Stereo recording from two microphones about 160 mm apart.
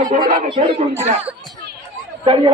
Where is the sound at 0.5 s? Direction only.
30° right (ahead or behind).